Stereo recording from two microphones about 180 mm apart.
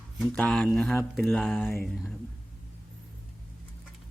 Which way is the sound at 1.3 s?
Centre (ahead or behind).